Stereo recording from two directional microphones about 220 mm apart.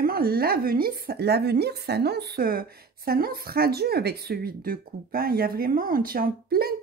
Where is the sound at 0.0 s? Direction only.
45° right (ahead or behind).